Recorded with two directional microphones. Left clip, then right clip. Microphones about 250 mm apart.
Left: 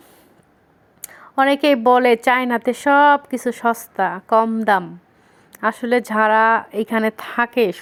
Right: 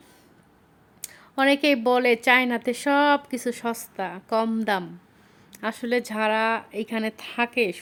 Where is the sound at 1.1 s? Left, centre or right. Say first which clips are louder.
Left 5 dB; centre.